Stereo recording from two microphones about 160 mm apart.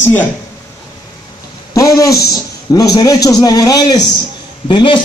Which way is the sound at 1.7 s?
20° left (ahead or behind).